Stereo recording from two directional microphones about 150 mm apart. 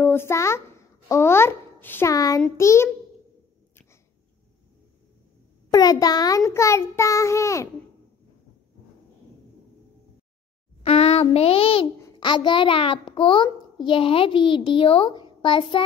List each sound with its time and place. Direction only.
0.0 s a child's voice: 15° left (ahead or behind)
5.7 s a child's voice: 25° left (ahead or behind)
10.8 s a child's voice: 40° left (ahead or behind)